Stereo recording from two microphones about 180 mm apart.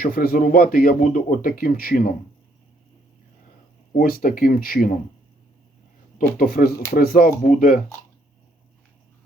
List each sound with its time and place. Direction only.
0.0 s a man's voice: 55° left (ahead or behind)
3.9 s a man's voice: 55° left (ahead or behind)
6.3 s a man's voice: 55° left (ahead or behind)